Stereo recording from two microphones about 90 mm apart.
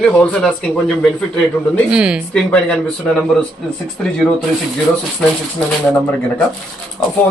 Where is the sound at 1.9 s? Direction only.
10° right (ahead or behind).